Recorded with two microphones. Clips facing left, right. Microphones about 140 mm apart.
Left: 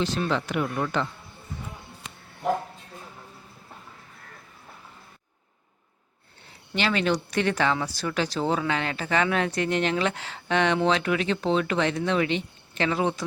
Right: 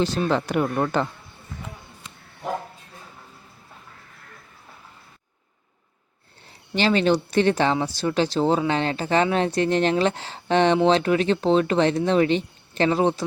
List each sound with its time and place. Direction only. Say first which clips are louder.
0.0 s speech: right 4 dB; 35° right (ahead or behind)
6.7 s speech: right 5 dB; 30° right (ahead or behind)